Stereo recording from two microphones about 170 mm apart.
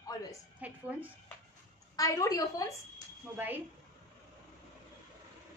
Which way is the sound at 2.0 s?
20° left (ahead or behind).